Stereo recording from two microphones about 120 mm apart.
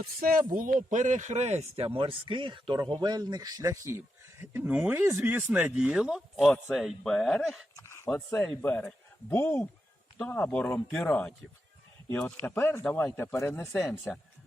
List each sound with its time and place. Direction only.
0.3 s a man's voice: 90° right; by 1.9 s 65° right (ahead or behind)
2.0 s a man's voice: 45° right (ahead or behind); by 7.7 s centre (ahead or behind)
7.8 s a sound: 25° left (ahead or behind)
8.4 s speech: 10° left (ahead or behind)